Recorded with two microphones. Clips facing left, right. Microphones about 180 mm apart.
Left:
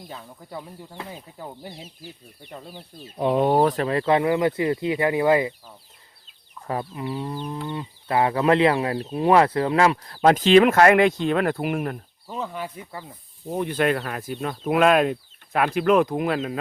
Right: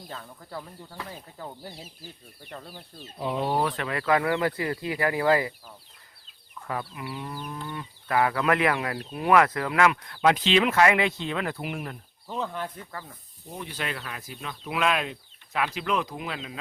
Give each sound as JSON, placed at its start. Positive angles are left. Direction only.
{"t": 0.1, "sound": "speech", "side_deg": 15}
{"t": 3.2, "sound": "speech", "side_deg": 60}
{"t": 6.7, "sound": "speech", "side_deg": 30}
{"t": 12.3, "sound": "speech", "side_deg": 5}
{"t": 13.5, "sound": "speech", "side_deg": 55}